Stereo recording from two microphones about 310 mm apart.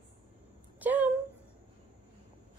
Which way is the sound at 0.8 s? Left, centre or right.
Centre.